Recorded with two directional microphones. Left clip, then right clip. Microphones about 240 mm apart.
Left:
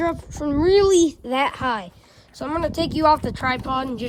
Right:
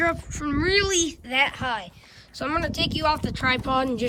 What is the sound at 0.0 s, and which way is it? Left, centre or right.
Speech, centre.